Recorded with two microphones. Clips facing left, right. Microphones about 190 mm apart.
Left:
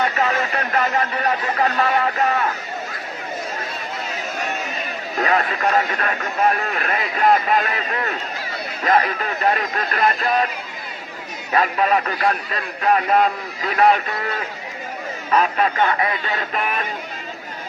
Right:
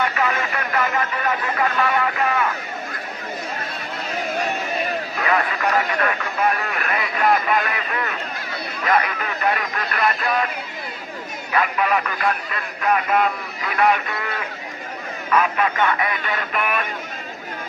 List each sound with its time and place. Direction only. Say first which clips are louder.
0.0 s speech: left 2 dB; 35° left (ahead or behind)
5.1 s speech: left 4 dB; 40° left (ahead or behind)
11.5 s speech: left 2 dB; 30° left (ahead or behind)
15.3 s speech: left 1 dB; 35° left (ahead or behind)